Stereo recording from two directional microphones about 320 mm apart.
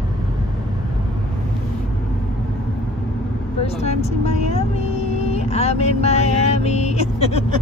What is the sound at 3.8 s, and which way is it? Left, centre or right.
Vehicle, centre.